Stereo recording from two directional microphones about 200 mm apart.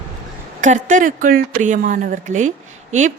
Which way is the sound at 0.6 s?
40° right (ahead or behind).